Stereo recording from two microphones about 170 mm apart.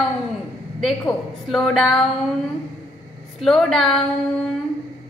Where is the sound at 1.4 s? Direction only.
Centre (ahead or behind).